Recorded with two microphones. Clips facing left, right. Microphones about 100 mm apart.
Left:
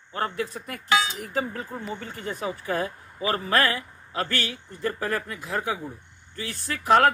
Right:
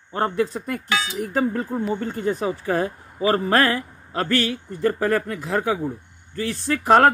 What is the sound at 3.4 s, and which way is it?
Speech, 40° right (ahead or behind).